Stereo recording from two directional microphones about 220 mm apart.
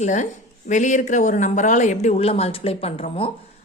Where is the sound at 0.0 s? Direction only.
35° left (ahead or behind).